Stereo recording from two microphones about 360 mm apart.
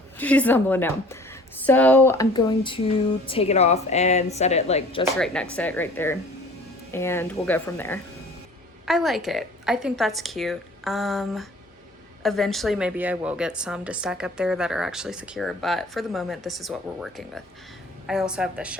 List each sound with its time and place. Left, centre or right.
0.2 s a woman's voice: centre
5.1 s a woman's voice: centre